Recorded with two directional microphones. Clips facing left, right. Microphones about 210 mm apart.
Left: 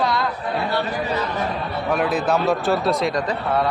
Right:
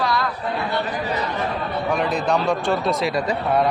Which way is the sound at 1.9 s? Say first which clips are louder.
Left 2 dB; 5° left (ahead or behind).